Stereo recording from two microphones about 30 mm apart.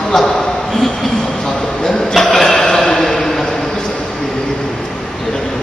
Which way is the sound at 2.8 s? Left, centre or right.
Centre.